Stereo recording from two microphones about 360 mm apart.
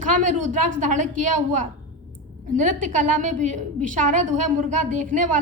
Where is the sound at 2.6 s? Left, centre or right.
Right.